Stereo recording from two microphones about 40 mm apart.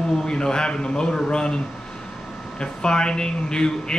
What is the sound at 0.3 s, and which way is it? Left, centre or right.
A man's voice, centre.